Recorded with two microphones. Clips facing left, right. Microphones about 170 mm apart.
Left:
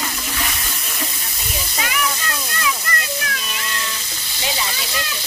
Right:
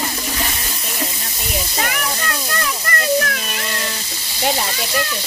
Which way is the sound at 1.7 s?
50° right (ahead or behind).